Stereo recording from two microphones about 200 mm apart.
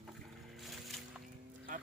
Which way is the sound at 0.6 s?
Centre (ahead or behind).